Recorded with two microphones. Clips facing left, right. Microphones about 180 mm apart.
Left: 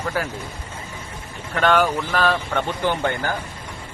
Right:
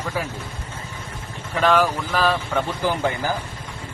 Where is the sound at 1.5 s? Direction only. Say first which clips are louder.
Even; centre (ahead or behind).